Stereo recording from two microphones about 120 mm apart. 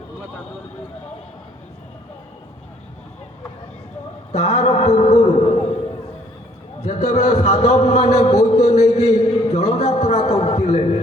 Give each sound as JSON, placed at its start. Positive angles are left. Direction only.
{"t": 4.3, "sound": "a man's voice", "side_deg": 65}
{"t": 6.8, "sound": "a man's voice", "side_deg": 75}